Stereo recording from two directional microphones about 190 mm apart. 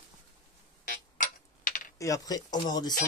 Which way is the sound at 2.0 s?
20° left (ahead or behind).